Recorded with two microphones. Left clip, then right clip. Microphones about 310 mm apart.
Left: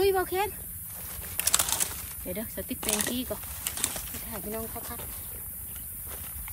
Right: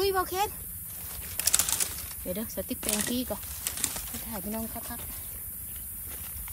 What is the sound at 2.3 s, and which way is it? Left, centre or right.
Speech, centre.